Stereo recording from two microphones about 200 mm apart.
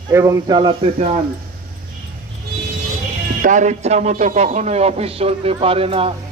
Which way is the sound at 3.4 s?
40° right (ahead or behind).